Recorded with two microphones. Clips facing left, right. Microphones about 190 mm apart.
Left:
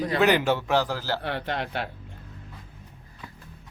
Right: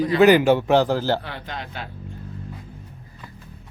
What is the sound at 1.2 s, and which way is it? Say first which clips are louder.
Speech: left 4 dB; 65° left (ahead or behind).